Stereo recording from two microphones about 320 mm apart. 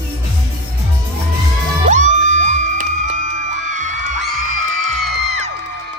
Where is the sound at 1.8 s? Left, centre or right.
Right.